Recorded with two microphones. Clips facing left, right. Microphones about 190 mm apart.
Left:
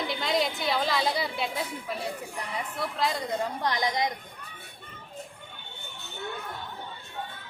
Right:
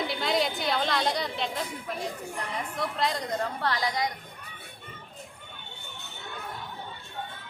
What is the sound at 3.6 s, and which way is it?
Speech, 20° left (ahead or behind).